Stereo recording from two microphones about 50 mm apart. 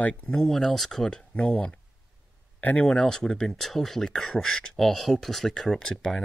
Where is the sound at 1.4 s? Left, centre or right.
Left.